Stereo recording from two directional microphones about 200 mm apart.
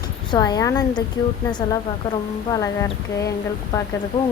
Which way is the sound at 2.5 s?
15° left (ahead or behind).